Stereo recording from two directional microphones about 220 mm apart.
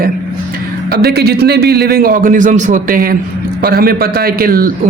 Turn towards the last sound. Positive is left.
turn(degrees=-40)  # may be behind; listen again after turning